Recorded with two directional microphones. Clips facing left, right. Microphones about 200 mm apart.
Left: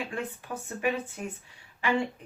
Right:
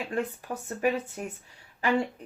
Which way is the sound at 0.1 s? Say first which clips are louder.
Right 4 dB; 40° right (ahead or behind).